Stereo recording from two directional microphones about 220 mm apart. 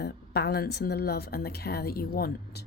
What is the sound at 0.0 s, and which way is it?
Speech, 50° left (ahead or behind).